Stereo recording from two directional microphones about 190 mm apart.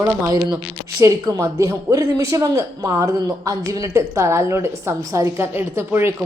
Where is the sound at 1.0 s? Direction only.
15° right (ahead or behind).